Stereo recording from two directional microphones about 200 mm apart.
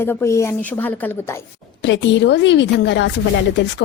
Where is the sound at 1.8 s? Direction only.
60° left (ahead or behind).